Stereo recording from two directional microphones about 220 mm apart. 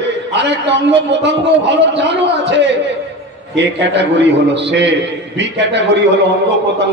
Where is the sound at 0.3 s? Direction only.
50° right (ahead or behind).